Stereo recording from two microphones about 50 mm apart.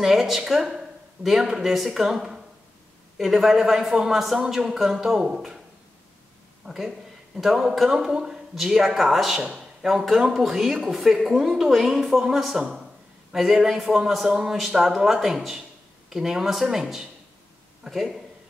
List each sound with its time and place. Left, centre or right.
0.0 s speech: centre
6.6 s speech: centre